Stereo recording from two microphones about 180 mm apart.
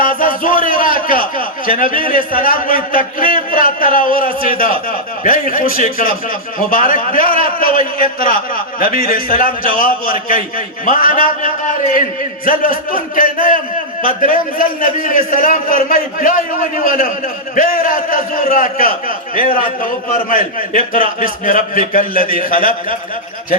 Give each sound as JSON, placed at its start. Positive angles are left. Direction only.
{"t": 0.0, "sound": "a sound", "side_deg": 50}
{"t": 0.8, "sound": "a man's voice", "side_deg": 50}
{"t": 12.5, "sound": "a man's voice", "side_deg": 50}